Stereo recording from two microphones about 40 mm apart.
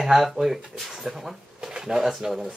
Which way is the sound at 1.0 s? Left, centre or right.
Centre.